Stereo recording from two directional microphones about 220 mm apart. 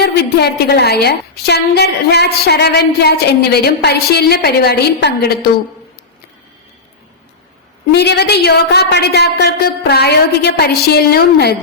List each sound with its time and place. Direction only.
0.0 s a woman's voice: 45° left (ahead or behind)
7.9 s a woman's voice: 50° left (ahead or behind)